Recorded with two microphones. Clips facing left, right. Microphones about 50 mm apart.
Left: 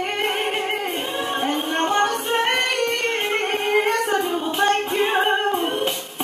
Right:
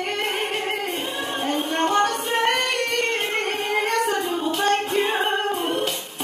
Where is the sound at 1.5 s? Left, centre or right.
Centre.